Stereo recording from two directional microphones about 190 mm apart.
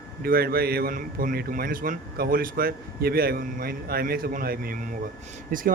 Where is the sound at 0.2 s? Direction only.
55° right (ahead or behind).